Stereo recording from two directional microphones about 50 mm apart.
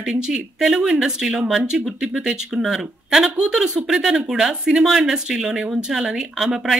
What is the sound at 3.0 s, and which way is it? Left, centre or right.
Speech, centre.